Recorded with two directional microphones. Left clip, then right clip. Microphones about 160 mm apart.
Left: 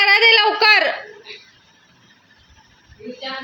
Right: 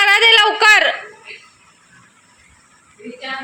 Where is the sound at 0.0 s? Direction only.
5° left (ahead or behind).